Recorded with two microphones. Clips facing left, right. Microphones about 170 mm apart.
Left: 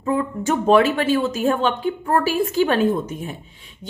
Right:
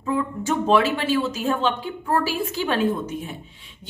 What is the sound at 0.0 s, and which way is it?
A woman's voice, 55° left (ahead or behind).